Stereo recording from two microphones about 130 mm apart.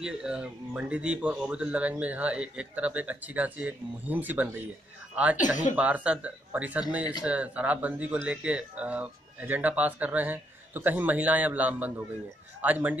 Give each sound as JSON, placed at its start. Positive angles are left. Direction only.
{"t": 0.0, "sound": "speech", "side_deg": -5}
{"t": 5.4, "sound": "speech", "side_deg": 75}
{"t": 5.8, "sound": "speech", "side_deg": -10}